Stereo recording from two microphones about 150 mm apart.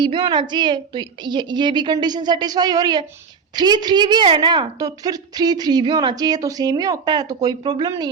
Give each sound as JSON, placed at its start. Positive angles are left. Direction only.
{"t": 0.0, "sound": "a woman's voice", "side_deg": -30}